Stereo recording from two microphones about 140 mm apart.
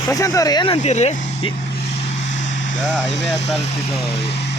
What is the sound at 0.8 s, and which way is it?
Speech, 50° left (ahead or behind).